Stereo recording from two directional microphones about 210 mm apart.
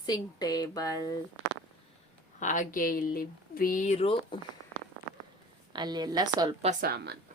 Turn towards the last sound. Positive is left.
turn(degrees=-50)  # may be behind; listen again after turning